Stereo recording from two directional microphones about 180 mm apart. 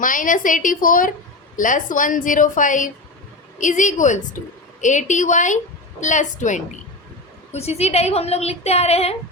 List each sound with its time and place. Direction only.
0.0 s a woman's voice: 45° left (ahead or behind)